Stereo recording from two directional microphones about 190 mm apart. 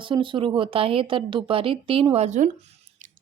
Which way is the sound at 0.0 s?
25° right (ahead or behind).